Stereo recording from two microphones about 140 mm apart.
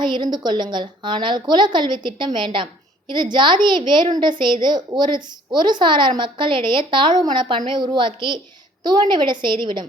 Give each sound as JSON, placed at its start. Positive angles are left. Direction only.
{"t": 0.0, "sound": "a woman's voice", "side_deg": -35}